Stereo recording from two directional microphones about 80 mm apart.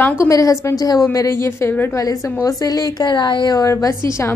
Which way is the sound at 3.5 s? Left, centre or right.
Left.